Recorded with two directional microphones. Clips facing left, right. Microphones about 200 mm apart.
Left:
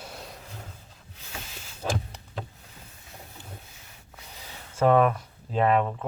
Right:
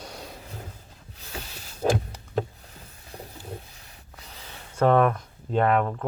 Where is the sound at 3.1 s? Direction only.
35° right (ahead or behind).